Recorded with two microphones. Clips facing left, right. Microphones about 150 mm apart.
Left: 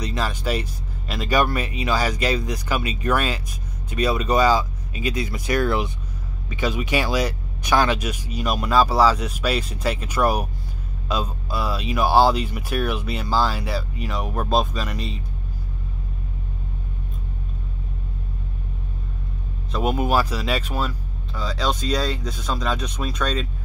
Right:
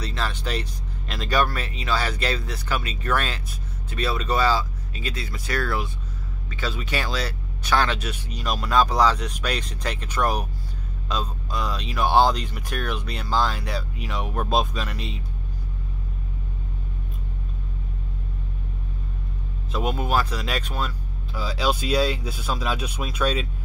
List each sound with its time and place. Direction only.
0.0 s speech: 15° left (ahead or behind)
19.7 s speech: 5° left (ahead or behind)